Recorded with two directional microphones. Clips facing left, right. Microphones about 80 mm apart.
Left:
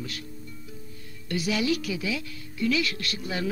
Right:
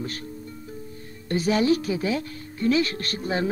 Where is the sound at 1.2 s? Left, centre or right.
Right.